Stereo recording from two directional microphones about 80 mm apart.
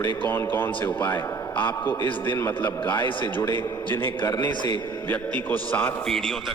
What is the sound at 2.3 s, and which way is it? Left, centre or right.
Speech, left.